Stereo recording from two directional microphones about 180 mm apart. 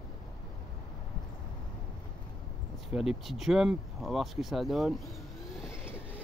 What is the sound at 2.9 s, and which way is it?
Speech, 5° right (ahead or behind).